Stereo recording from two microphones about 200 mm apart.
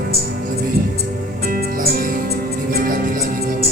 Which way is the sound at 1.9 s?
50° right (ahead or behind).